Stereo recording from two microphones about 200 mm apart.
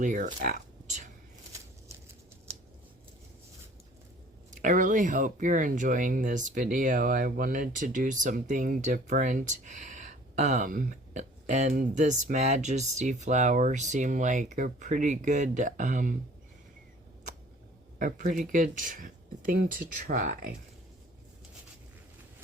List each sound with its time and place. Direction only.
0.0 s speech: 40° right (ahead or behind)
4.5 s speech: 40° right (ahead or behind)
18.0 s speech: 40° right (ahead or behind)